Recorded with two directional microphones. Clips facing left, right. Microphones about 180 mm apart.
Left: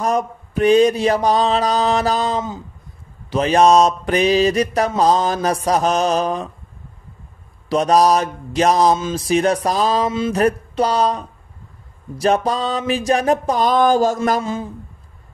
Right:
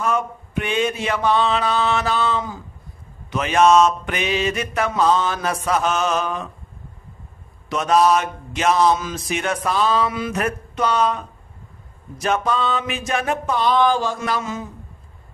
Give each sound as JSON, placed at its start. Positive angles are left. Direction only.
{"t": 0.0, "sound": "mantra", "side_deg": 40}
{"t": 7.7, "sound": "mantra", "side_deg": 35}